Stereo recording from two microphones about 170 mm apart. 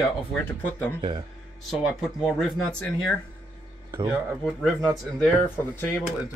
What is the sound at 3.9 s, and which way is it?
Speech, 25° right (ahead or behind).